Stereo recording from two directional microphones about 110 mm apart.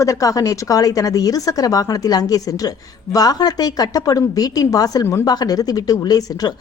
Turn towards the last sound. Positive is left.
turn(degrees=35)  # may be behind; listen again after turning